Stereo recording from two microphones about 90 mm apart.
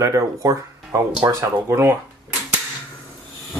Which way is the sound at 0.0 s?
35° right (ahead or behind).